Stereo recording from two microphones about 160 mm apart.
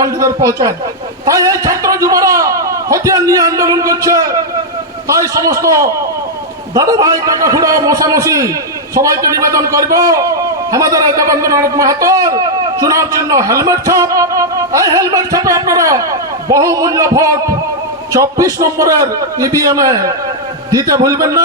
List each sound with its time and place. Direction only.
0.0 s a man's voice: 20° right (ahead or behind)